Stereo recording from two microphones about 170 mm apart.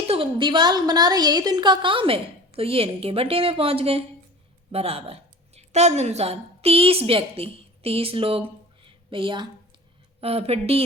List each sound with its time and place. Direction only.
0.1 s a woman's voice: 30° right (ahead or behind)